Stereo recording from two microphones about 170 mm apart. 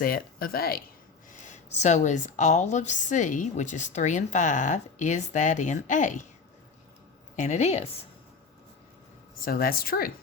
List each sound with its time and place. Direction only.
0.0 s speech: 60° left (ahead or behind)
1.3 s a woman's voice: 45° left (ahead or behind)
7.3 s a woman's voice: 45° left (ahead or behind)
9.4 s speech: 60° left (ahead or behind)